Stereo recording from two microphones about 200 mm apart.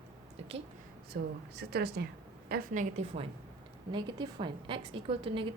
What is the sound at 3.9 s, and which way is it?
A woman's voice, 25° right (ahead or behind).